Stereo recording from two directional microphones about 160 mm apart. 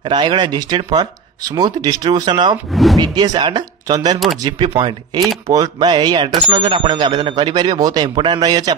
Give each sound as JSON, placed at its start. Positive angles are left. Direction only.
{"t": 0.0, "sound": "speech", "side_deg": -30}
{"t": 2.7, "sound": "speech", "side_deg": 0}
{"t": 3.0, "sound": "speech", "side_deg": -25}